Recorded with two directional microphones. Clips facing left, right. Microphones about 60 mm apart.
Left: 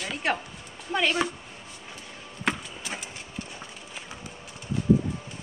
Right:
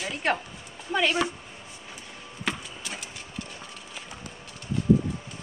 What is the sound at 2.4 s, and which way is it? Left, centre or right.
Chop, left.